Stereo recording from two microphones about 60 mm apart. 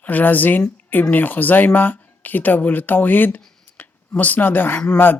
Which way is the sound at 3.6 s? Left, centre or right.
Left.